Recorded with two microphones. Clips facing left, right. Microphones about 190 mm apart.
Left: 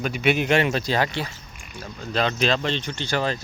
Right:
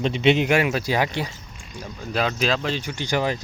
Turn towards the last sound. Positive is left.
turn(degrees=-15)  # may be behind; listen again after turning